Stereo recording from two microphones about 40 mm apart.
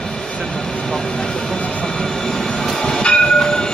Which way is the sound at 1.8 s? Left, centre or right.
Centre.